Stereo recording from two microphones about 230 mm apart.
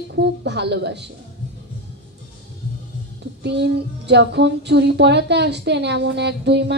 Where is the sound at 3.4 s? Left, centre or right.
Right.